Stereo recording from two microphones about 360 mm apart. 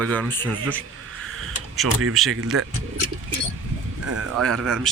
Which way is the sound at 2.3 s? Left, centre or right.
Right.